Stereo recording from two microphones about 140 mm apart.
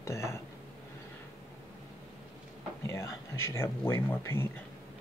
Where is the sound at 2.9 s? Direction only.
20° left (ahead or behind).